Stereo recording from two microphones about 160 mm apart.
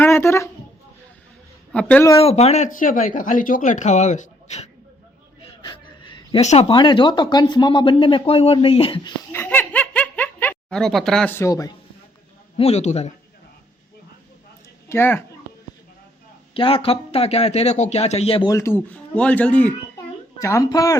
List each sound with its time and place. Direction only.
0.0 s a sound: 15° left (ahead or behind)
1.7 s speech: 5° left (ahead or behind)
2.1 s speech: 40° left (ahead or behind)
5.6 s a sound: 30° left (ahead or behind)
6.4 s speech: 45° left (ahead or behind)
6.7 s speech: 30° left (ahead or behind)
9.3 s giggle: 15° left (ahead or behind)
11.3 s speech: 20° left (ahead or behind)
12.5 s speech: 40° left (ahead or behind)
14.8 s speech: 15° left (ahead or behind)
16.6 s speech: 35° left (ahead or behind)
18.4 s speech: 20° left (ahead or behind)
20.4 s speech: 20° left (ahead or behind)